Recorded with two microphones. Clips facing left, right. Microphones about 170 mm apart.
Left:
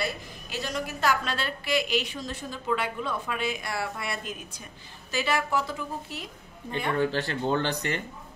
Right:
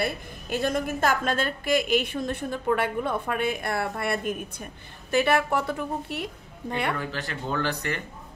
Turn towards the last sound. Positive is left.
turn(degrees=20)  # may be behind; listen again after turning